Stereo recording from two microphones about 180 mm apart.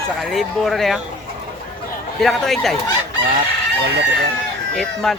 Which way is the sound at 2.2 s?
Centre (ahead or behind).